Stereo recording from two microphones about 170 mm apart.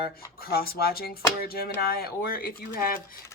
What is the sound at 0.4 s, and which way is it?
Speech, 65° left (ahead or behind).